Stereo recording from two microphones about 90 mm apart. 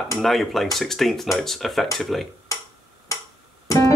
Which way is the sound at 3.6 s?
40° left (ahead or behind).